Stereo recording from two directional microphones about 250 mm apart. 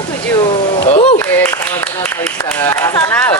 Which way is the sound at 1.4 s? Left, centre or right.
Centre.